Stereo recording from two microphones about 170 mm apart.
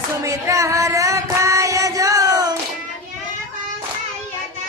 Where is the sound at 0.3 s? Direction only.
20° right (ahead or behind).